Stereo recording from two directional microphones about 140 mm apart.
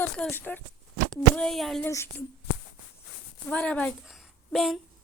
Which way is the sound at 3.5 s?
10° left (ahead or behind).